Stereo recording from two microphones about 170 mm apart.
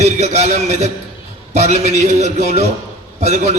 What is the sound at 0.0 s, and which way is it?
A man's voice, 40° right (ahead or behind).